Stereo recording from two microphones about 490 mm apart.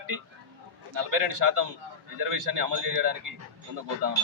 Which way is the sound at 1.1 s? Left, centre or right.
Right.